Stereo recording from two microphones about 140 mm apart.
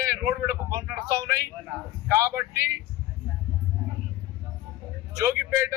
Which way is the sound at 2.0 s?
20° right (ahead or behind).